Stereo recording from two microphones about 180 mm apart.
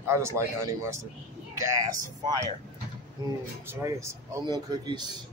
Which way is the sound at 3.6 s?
15° right (ahead or behind).